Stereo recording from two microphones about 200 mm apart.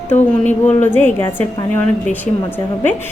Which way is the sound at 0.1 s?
10° left (ahead or behind).